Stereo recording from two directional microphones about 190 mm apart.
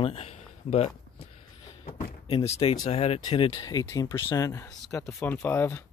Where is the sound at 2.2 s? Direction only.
35° left (ahead or behind).